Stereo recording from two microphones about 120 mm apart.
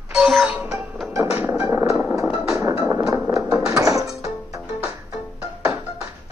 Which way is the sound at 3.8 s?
25° right (ahead or behind).